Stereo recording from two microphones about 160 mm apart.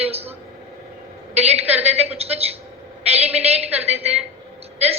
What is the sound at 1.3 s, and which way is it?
A man's voice, 40° right (ahead or behind).